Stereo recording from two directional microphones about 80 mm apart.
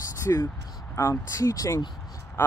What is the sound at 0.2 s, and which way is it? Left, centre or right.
Speech, left.